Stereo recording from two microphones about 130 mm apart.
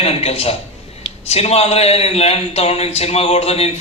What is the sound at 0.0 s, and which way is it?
A man's voice, 50° left (ahead or behind).